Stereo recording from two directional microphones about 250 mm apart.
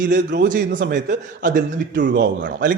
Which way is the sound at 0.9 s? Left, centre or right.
Right.